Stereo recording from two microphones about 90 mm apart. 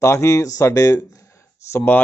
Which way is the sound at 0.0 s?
35° left (ahead or behind).